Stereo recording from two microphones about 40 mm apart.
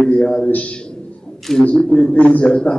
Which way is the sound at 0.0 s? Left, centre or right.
Left.